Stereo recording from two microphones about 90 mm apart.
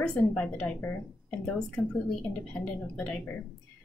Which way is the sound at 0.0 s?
10° left (ahead or behind).